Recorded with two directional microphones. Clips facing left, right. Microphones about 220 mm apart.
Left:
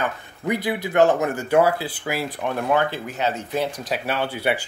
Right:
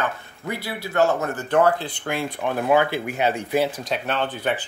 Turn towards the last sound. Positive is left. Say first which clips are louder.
# left 1 dB
turn(degrees=10)  # may be behind; listen again after turning